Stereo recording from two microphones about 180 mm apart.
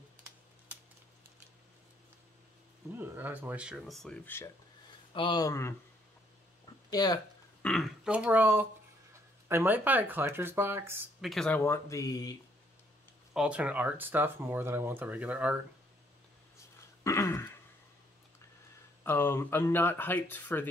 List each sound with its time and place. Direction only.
3.0 s speech: 10° right (ahead or behind); by 4.5 s 10° left (ahead or behind)
5.1 s speech: 25° left (ahead or behind)
6.9 s speech: 20° left (ahead or behind)
7.6 s speech: centre (ahead or behind)
11.1 s speech: centre (ahead or behind); by 12.4 s 20° left (ahead or behind)
13.3 s speech: 5° right (ahead or behind)
17.0 s throat clearing: 15° left (ahead or behind)
19.0 s speech: 10° left (ahead or behind)